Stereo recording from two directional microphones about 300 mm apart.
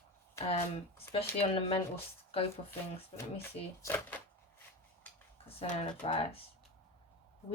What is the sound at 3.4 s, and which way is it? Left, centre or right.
Speech, centre.